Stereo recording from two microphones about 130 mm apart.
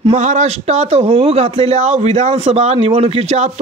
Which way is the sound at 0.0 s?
65° right (ahead or behind).